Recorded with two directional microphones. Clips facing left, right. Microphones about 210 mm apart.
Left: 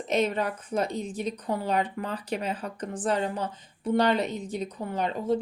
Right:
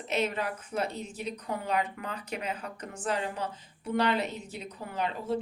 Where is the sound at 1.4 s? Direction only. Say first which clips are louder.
Left 3 dB; 35° left (ahead or behind).